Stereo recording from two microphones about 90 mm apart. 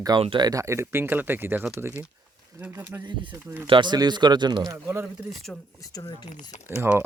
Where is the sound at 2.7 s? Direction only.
30° right (ahead or behind).